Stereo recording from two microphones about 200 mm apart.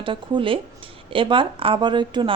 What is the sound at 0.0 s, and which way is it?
Speech, 25° right (ahead or behind).